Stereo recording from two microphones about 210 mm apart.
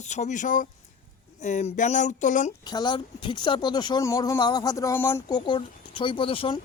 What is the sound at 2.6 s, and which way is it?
Speech, 20° left (ahead or behind).